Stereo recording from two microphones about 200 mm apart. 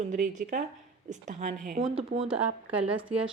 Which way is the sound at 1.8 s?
25° right (ahead or behind).